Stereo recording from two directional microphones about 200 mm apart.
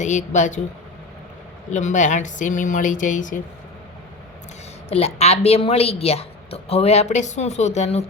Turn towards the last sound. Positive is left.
turn(degrees=35)  # may be behind; listen again after turning